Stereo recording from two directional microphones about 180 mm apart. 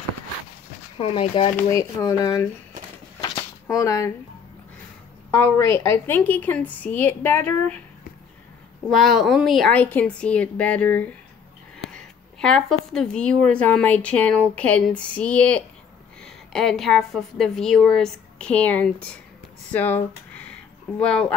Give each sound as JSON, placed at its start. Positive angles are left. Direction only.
{"t": 0.9, "sound": "speech", "side_deg": 30}
{"t": 1.6, "sound": "speech", "side_deg": 20}
{"t": 3.6, "sound": "speech", "side_deg": 20}
{"t": 5.3, "sound": "a woman's voice", "side_deg": 15}
{"t": 8.8, "sound": "a woman's voice", "side_deg": 0}
{"t": 11.8, "sound": "a sound", "side_deg": 5}
{"t": 13.5, "sound": "a woman's voice", "side_deg": 5}